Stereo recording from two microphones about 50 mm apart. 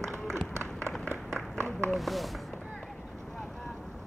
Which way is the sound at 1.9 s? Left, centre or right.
Centre.